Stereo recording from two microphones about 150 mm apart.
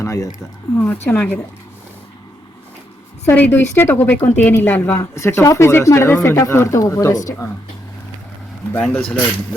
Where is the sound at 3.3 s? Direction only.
10° left (ahead or behind).